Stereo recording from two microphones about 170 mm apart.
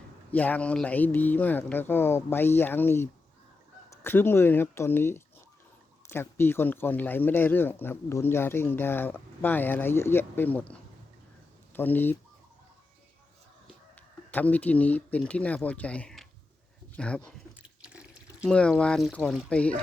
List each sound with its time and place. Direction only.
0.3 s speech: 10° left (ahead or behind)
14.3 s speech: 10° left (ahead or behind)
17.6 s drip: 5° right (ahead or behind)
18.5 s speech: 5° left (ahead or behind)